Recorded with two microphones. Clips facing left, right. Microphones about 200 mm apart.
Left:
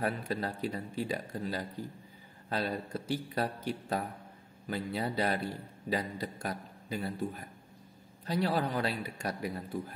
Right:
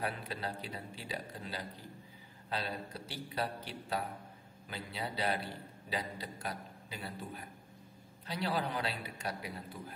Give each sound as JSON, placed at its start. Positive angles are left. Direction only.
{"t": 0.0, "sound": "a man's voice", "side_deg": 45}